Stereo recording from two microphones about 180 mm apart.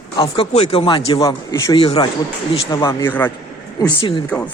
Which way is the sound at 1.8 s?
30° left (ahead or behind).